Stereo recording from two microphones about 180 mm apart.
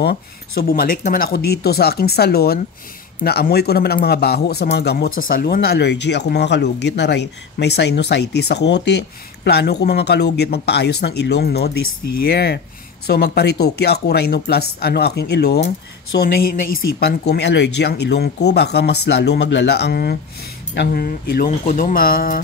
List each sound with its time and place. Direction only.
0.0 s speech: 65° left (ahead or behind)
21.5 s speech: 45° left (ahead or behind)